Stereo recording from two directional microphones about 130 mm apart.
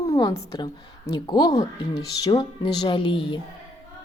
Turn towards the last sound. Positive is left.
turn(degrees=40)  # may be behind; listen again after turning